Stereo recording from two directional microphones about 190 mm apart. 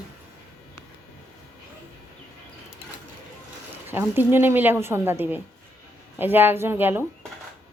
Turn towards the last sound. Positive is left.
turn(degrees=-10)  # may be behind; listen again after turning